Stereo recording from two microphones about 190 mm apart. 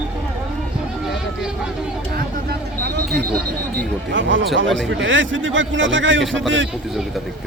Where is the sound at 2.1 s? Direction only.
50° right (ahead or behind).